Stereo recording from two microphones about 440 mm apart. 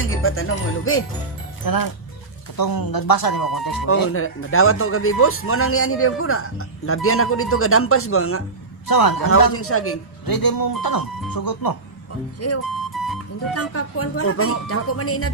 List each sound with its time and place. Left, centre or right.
0.0 s speech: left
1.6 s speech: left
4.1 s a man's voice: left
8.8 s speech: left
9.5 s a man's voice: left
10.2 s speech: left
12.4 s a man's voice: left